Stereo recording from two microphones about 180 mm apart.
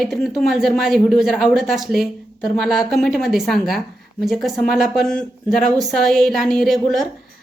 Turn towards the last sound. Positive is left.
turn(degrees=0)  # may be behind; listen again after turning